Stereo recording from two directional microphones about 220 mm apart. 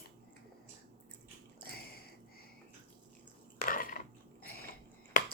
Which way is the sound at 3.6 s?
40° left (ahead or behind).